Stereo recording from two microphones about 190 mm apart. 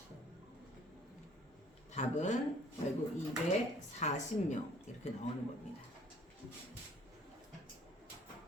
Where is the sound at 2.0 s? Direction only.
40° left (ahead or behind).